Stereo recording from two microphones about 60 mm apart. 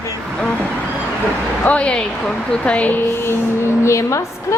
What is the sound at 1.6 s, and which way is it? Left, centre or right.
Speech, left.